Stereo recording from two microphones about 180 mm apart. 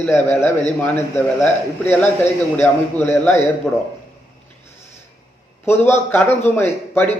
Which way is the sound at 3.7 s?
Centre (ahead or behind).